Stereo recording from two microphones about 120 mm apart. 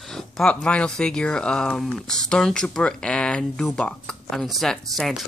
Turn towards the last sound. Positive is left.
turn(degrees=0)  # may be behind; listen again after turning